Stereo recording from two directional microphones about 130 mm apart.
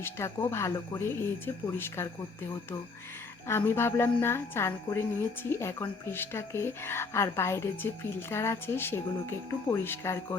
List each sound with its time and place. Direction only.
0.0 s a woman's voice: 20° left (ahead or behind)
3.4 s a woman's voice: 20° left (ahead or behind)